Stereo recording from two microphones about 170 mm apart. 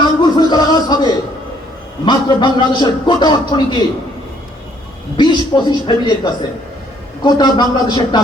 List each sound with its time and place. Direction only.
0.0 s music: 25° left (ahead or behind)
2.0 s a man's voice: 25° left (ahead or behind)
5.1 s a man's voice: 25° left (ahead or behind)